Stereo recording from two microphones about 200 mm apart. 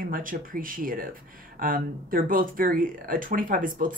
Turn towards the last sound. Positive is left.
turn(degrees=-40)  # may be behind; listen again after turning